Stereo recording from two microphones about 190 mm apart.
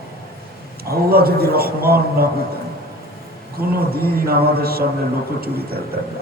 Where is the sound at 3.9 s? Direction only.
55° right (ahead or behind).